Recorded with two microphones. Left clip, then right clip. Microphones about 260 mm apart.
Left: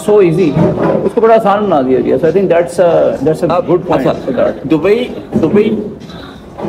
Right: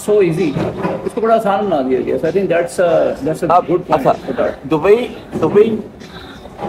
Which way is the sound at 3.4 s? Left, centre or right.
Centre.